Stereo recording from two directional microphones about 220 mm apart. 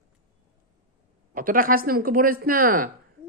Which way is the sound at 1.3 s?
40° right (ahead or behind).